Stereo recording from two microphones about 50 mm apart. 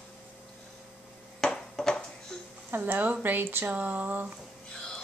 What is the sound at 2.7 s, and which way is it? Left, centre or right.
A woman's voice, right.